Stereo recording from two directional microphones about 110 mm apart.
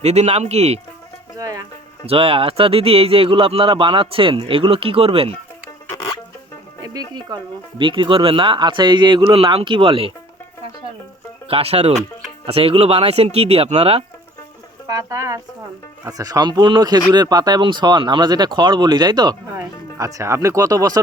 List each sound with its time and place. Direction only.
0.0 s speech: 90° right
1.4 s speech: 30° right (ahead or behind)
2.0 s speech: 60° right (ahead or behind)
7.1 s speech: 40° right (ahead or behind)
11.4 s speech: 65° right (ahead or behind)
14.8 s speech: 30° right (ahead or behind)
19.5 s speech: 30° right (ahead or behind)